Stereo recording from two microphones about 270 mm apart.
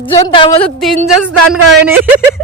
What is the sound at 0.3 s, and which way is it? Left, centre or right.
Speech, centre.